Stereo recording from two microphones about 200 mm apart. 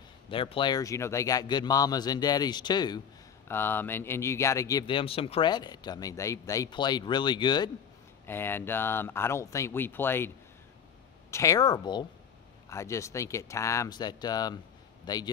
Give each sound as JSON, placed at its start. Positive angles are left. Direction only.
{"t": 0.3, "sound": "speech", "side_deg": 25}
{"t": 8.3, "sound": "speech", "side_deg": 10}